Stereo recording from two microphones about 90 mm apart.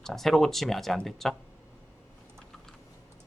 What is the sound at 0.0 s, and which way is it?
Speech, 5° left (ahead or behind).